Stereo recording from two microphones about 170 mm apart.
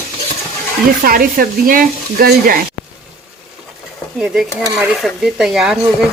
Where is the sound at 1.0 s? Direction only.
60° right (ahead or behind).